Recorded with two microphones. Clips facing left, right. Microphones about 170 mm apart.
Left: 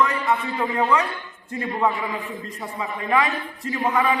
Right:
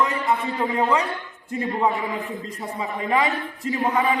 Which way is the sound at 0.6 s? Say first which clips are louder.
Even; 10° right (ahead or behind).